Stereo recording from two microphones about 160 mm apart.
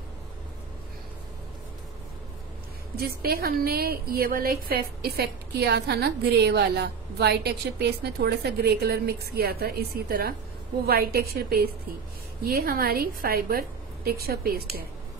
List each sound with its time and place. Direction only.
3.0 s a woman's voice: 70° right (ahead or behind)